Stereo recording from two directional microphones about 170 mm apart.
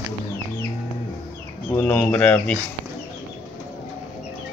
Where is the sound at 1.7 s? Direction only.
10° left (ahead or behind).